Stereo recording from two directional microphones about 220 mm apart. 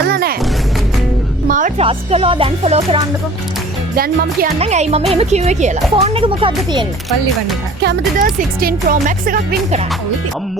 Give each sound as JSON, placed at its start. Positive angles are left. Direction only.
{"t": 0.1, "sound": "music", "side_deg": -45}
{"t": 1.5, "sound": "speech", "side_deg": -35}
{"t": 3.9, "sound": "speech", "side_deg": -40}
{"t": 4.6, "sound": "speech", "side_deg": -30}
{"t": 7.8, "sound": "speech", "side_deg": -45}